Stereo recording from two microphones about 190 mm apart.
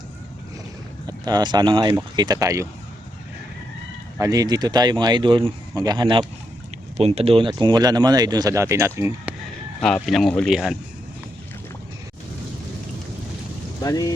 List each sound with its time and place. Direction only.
1.0 s speech: 20° right (ahead or behind)
4.2 s speech: 20° right (ahead or behind)
9.8 s speech: centre (ahead or behind)
13.8 s speech: 20° left (ahead or behind)